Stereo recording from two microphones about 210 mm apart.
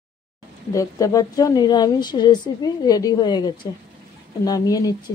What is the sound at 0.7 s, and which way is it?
A woman's voice, 15° left (ahead or behind).